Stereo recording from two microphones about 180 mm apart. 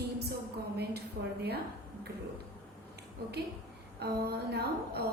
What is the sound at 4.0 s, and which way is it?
A woman's voice, 65° right (ahead or behind).